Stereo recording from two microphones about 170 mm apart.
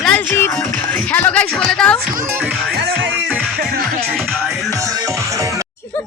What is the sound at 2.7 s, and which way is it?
Music, 80° right.